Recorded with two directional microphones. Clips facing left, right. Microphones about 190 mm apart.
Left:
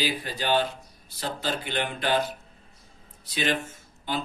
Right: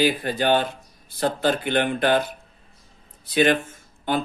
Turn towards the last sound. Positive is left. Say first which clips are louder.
# right 7 dB
turn(degrees=-55)  # may be behind; listen again after turning